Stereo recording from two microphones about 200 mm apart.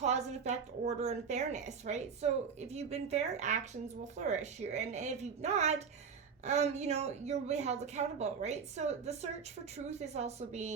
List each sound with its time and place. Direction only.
0.0 s a woman's voice: 35° right (ahead or behind)